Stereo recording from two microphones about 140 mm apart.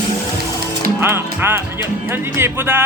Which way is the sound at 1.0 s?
15° right (ahead or behind).